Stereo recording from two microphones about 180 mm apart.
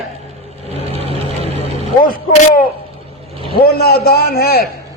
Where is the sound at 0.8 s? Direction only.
35° right (ahead or behind).